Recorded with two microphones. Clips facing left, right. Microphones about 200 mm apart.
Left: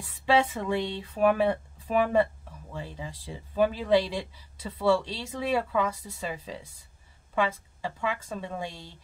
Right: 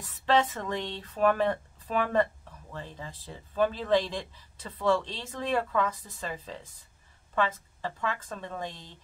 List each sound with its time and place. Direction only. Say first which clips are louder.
0.0 s speech: left 1 dB; 10° left (ahead or behind)